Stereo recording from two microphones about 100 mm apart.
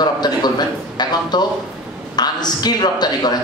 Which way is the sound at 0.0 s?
45° left (ahead or behind).